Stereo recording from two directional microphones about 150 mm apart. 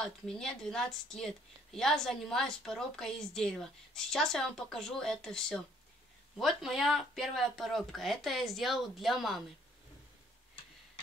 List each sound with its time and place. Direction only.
0.0 s speech: 5° left (ahead or behind)